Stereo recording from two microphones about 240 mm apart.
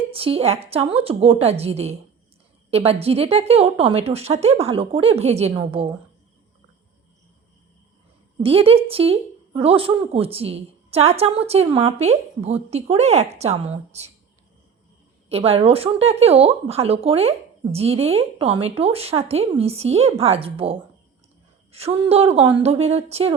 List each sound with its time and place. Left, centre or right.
0.1 s speech: right
8.4 s speech: right
15.3 s speech: right